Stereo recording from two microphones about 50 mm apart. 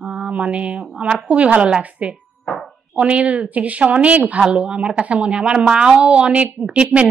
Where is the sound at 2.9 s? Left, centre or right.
Right.